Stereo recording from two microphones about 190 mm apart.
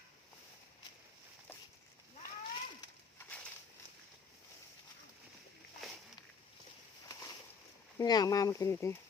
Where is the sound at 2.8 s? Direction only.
10° left (ahead or behind).